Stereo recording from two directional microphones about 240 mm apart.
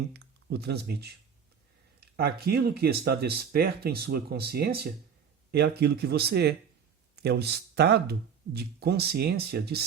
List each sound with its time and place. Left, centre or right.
0.1 s speech: right
2.1 s speech: right